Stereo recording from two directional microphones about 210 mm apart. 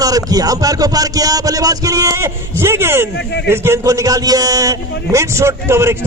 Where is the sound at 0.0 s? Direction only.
15° right (ahead or behind).